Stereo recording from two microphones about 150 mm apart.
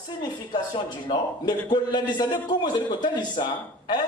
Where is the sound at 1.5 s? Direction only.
30° left (ahead or behind).